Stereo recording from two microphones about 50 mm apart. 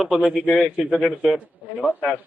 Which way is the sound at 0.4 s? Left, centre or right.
Centre.